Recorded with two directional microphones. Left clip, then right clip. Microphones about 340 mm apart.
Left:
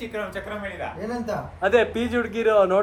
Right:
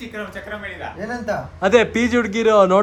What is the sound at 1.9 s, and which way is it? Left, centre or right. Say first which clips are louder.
Speech: right 7 dB; right.